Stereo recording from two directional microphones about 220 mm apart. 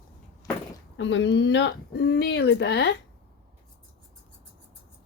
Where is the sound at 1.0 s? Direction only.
55° left (ahead or behind).